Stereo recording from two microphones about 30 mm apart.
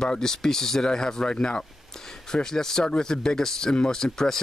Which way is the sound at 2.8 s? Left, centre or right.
Left.